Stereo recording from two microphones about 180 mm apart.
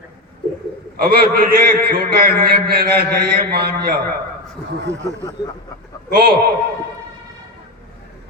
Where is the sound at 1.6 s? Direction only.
55° right (ahead or behind).